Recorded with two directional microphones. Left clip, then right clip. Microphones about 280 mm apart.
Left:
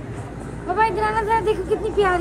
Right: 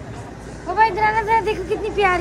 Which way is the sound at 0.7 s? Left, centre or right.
Centre.